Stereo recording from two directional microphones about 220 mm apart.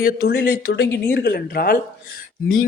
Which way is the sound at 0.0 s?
45° left (ahead or behind).